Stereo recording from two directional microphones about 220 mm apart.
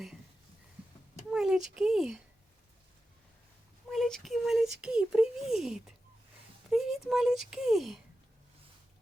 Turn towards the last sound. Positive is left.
turn(degrees=0)  # may be behind; listen again after turning